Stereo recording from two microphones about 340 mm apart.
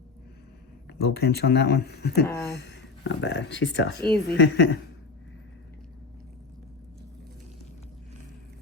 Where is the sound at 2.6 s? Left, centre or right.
Left.